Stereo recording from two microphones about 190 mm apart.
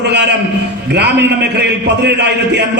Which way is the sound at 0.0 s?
65° right (ahead or behind).